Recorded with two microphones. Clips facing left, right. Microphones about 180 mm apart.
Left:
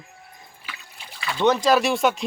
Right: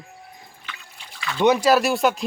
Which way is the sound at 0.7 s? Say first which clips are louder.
Right 1 dB; 10° left (ahead or behind).